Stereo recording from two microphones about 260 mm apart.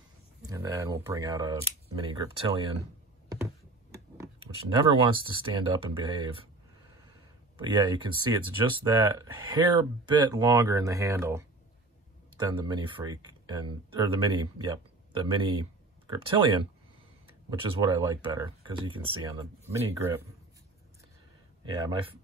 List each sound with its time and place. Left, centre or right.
0.4 s speech: centre
4.2 s speech: centre
7.5 s speech: centre
21.6 s speech: centre